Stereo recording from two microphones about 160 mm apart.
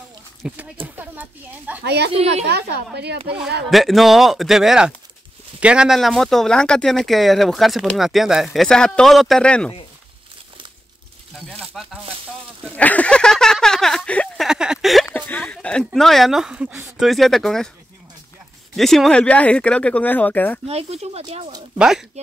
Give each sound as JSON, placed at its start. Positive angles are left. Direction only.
{"t": 0.4, "sound": "a sound", "side_deg": -10}
{"t": 1.9, "sound": "a woman's voice", "side_deg": -90}
{"t": 3.7, "sound": "speech", "side_deg": 0}
{"t": 11.4, "sound": "speech", "side_deg": 0}
{"t": 12.6, "sound": "a sound", "side_deg": 10}
{"t": 15.0, "sound": "speech", "side_deg": 10}
{"t": 18.8, "sound": "speech", "side_deg": 0}
{"t": 20.6, "sound": "speech", "side_deg": -40}
{"t": 21.7, "sound": "speech", "side_deg": -5}